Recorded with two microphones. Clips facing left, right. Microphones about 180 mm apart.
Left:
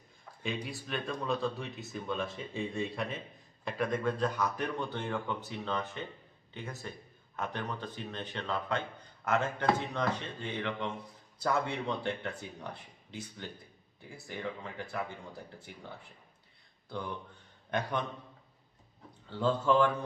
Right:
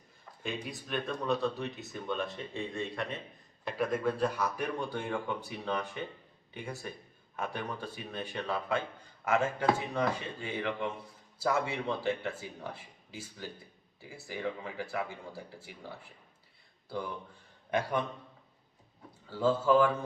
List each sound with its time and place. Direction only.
0.4 s a man's voice: centre (ahead or behind)
17.7 s a man's voice: 10° right (ahead or behind)
19.3 s speech: 5° right (ahead or behind)